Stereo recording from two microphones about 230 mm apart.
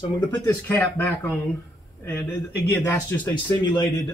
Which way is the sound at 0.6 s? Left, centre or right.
Centre.